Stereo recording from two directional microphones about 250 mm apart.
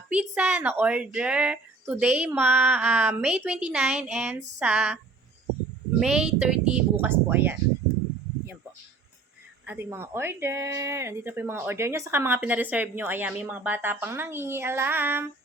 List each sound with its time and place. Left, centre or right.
0.1 s speech: centre
6.0 s speech: centre
9.6 s speech: centre